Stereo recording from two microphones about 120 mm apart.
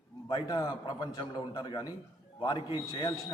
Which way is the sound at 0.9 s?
40° left (ahead or behind).